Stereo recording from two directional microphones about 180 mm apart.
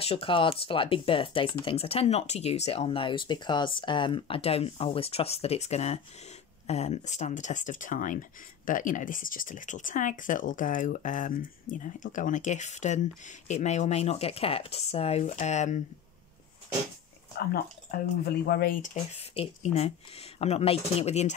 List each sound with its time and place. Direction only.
0.0 s speech: 30° left (ahead or behind)
17.4 s speech: 55° left (ahead or behind)
19.1 s speech: 35° left (ahead or behind)